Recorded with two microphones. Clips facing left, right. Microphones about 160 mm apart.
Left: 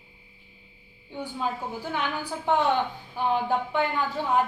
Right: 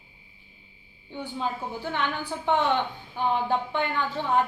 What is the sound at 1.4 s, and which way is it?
A woman's voice, 10° left (ahead or behind).